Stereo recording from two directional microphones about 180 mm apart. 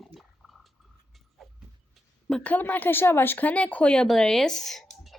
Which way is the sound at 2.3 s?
5° left (ahead or behind).